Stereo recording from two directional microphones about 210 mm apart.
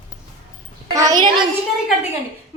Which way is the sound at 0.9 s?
15° right (ahead or behind).